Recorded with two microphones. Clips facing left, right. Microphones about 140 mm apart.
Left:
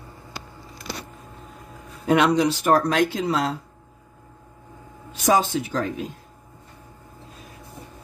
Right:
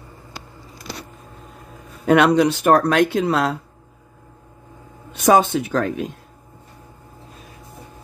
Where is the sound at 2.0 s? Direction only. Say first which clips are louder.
Right 4 dB; 60° right (ahead or behind).